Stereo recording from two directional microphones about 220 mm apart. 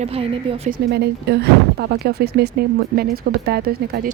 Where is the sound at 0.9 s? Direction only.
50° right (ahead or behind).